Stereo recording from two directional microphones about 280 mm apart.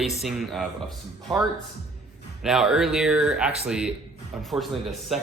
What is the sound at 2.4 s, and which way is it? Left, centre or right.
Speech, centre.